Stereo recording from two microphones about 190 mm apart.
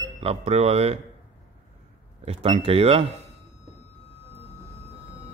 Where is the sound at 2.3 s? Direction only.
30° right (ahead or behind).